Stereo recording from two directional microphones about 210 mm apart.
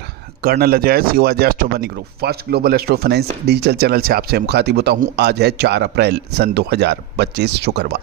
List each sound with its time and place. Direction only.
0.4 s speech: 45° right (ahead or behind)